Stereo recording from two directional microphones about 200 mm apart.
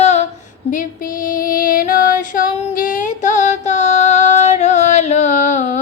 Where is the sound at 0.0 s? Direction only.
35° left (ahead or behind).